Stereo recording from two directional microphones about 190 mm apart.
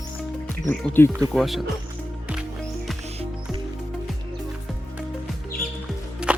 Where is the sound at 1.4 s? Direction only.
Centre (ahead or behind).